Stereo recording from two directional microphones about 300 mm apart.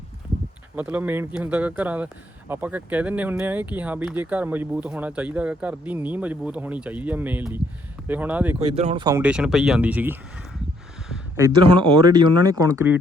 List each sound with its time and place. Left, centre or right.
0.8 s speech: centre
8.5 s speech: right